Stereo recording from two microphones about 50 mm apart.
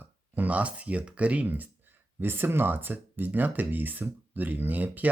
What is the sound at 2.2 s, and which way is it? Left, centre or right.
Speech, right.